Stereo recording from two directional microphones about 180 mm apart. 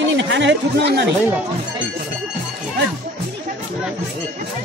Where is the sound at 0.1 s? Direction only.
80° right.